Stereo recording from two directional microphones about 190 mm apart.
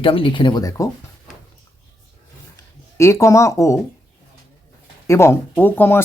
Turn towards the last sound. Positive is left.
turn(degrees=10)  # may be behind; listen again after turning